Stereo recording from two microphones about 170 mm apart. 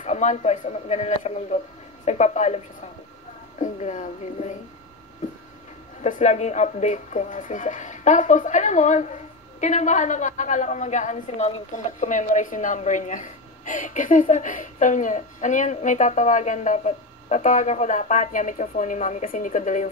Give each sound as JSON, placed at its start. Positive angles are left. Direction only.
{"t": 0.0, "sound": "speech", "side_deg": 45}
{"t": 6.0, "sound": "speech", "side_deg": 45}